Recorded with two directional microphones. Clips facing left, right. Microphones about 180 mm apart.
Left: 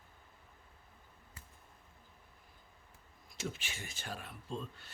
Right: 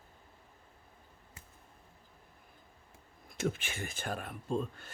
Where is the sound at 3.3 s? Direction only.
55° right (ahead or behind).